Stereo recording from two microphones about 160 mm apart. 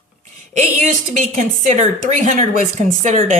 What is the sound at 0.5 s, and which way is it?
A woman's voice, 50° right (ahead or behind).